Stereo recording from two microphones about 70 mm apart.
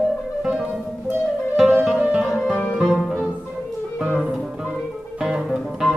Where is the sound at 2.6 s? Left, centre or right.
Centre.